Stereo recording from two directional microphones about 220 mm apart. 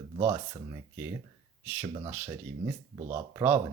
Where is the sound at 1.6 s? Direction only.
5° right (ahead or behind).